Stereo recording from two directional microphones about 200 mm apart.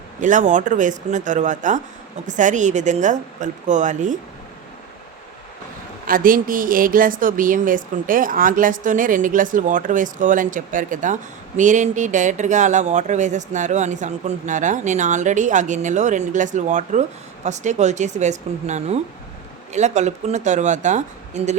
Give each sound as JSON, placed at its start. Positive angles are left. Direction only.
{"t": 0.2, "sound": "a woman's voice", "side_deg": -40}
{"t": 6.1, "sound": "a woman's voice", "side_deg": -45}